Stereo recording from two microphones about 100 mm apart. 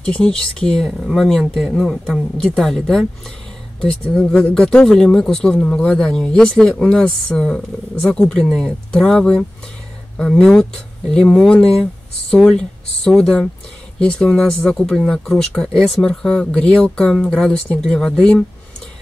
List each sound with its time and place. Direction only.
0.0 s speech: 10° left (ahead or behind)